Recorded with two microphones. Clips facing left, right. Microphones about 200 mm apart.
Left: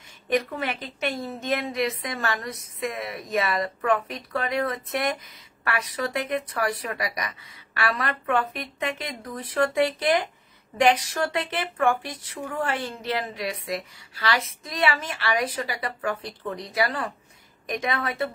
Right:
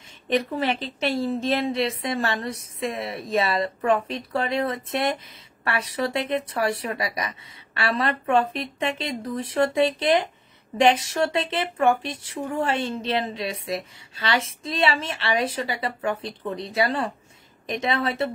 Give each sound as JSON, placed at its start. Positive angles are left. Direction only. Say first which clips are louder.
{"t": 0.3, "sound": "a woman's voice", "louder": "right 2 dB", "side_deg": -30}